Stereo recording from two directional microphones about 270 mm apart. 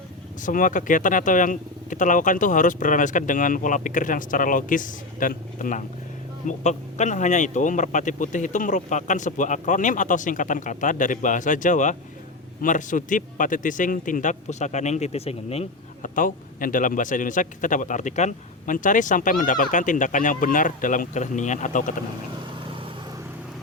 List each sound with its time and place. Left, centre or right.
0.4 s a man's voice: left